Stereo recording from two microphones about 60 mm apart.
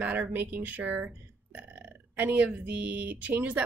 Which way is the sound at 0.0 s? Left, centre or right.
Right.